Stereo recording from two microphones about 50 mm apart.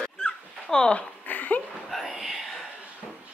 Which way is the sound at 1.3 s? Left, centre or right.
Left.